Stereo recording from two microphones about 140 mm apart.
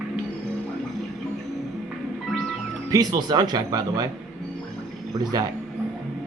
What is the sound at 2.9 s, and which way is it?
Speech, 25° right (ahead or behind).